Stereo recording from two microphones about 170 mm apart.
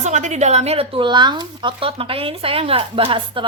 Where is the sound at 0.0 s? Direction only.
45° right (ahead or behind).